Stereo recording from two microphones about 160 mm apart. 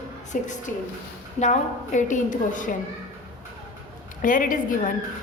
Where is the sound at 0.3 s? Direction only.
55° left (ahead or behind).